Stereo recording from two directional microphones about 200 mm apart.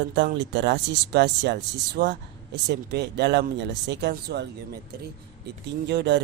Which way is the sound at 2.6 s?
55° right (ahead or behind).